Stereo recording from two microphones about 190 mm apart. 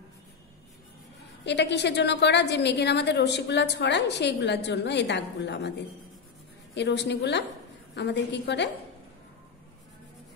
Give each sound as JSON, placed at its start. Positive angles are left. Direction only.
{"t": 1.4, "sound": "a woman's voice", "side_deg": 65}